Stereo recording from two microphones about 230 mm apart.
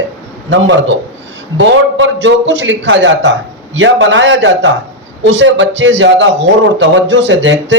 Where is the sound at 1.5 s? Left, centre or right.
Right.